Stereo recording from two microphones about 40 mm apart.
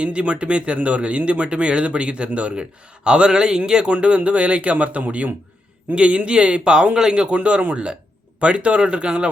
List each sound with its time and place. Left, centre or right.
0.0 s speech: right
3.0 s a man's voice: right
3.9 s a man's voice: right